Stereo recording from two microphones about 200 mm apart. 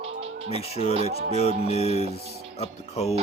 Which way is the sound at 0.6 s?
30° left (ahead or behind).